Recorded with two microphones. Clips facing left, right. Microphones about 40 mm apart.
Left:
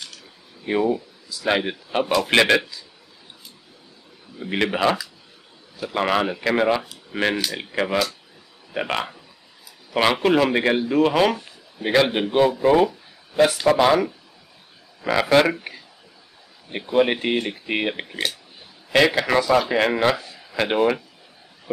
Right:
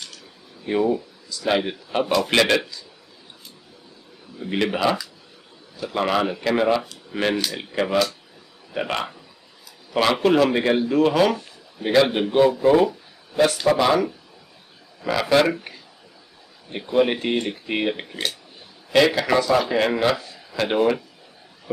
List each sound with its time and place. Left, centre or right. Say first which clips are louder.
0.7 s a man's voice: even; centre
4.4 s a man's voice: left 1 dB; centre
10.2 s a man's voice: right 2 dB; centre
15.0 s a sound: left 2 dB; centre
15.7 s a man's voice: left 3 dB; centre